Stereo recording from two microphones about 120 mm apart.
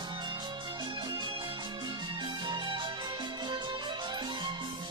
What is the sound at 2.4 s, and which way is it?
Music, 40° right (ahead or behind).